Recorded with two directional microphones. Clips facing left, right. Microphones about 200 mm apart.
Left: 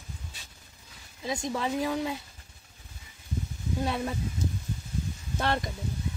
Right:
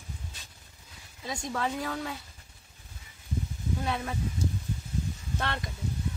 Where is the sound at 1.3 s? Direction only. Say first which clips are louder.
Left 2 dB; 20° left (ahead or behind).